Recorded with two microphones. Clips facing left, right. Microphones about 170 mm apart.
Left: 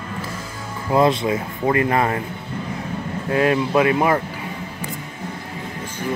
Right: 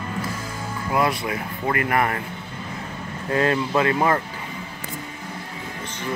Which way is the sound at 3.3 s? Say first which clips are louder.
Left 3 dB; 10° left (ahead or behind).